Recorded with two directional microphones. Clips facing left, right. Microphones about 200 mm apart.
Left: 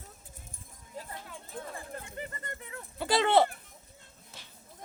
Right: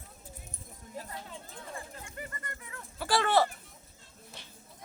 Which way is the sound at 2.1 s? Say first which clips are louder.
Left 3 dB; 25° left (ahead or behind).